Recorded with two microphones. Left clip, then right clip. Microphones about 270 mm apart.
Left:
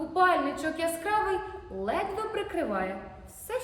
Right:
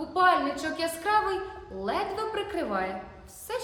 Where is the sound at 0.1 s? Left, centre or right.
Centre.